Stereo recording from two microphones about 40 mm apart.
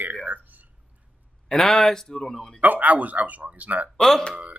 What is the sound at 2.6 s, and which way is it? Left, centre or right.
Speech, right.